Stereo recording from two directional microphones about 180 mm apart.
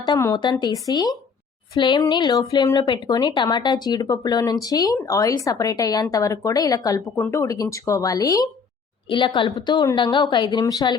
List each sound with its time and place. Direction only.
0.0 s speech: 20° left (ahead or behind)